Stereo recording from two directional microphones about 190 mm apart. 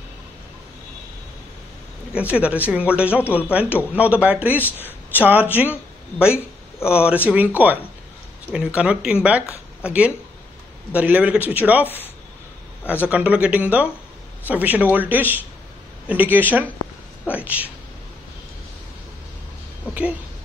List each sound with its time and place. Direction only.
2.1 s speech: 5° right (ahead or behind)
13.3 s speech: 5° right (ahead or behind)
19.9 s speech: 5° right (ahead or behind)